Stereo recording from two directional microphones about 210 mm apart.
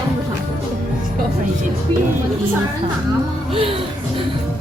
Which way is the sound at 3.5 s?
25° right (ahead or behind).